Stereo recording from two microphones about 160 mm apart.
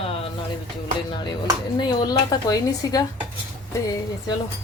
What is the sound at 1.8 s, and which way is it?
A child's voice, 25° left (ahead or behind).